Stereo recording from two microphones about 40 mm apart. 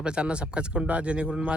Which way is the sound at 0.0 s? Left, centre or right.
Right.